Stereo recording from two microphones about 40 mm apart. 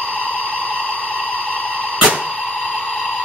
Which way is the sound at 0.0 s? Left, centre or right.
Left.